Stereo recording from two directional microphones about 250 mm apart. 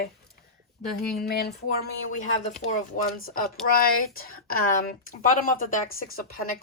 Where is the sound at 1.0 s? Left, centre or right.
Centre.